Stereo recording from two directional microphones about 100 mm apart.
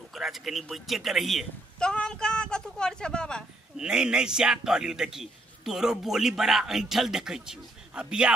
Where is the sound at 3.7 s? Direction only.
5° right (ahead or behind).